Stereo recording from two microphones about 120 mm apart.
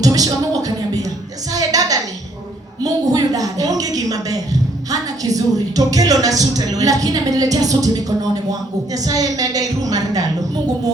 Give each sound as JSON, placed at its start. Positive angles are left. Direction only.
{"t": 0.0, "sound": "music", "side_deg": -30}
{"t": 1.5, "sound": "a sound", "side_deg": -30}
{"t": 4.9, "sound": "a woman's voice", "side_deg": -30}